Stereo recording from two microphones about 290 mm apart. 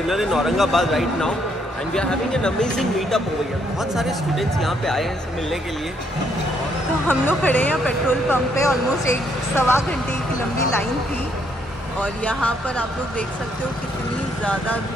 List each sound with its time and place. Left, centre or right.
0.1 s speech: centre
7.1 s speech: centre
12.0 s speech: centre
14.4 s speech: centre